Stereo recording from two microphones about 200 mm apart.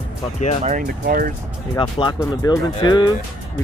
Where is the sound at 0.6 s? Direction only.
40° right (ahead or behind).